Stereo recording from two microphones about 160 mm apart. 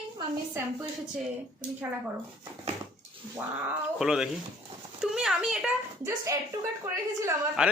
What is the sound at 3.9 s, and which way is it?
A man's voice, 5° right (ahead or behind).